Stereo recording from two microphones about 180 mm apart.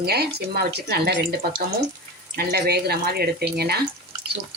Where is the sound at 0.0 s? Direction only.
60° right (ahead or behind).